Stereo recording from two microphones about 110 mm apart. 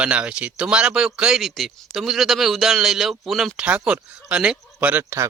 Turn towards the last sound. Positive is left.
turn(degrees=-20)  # may be behind; listen again after turning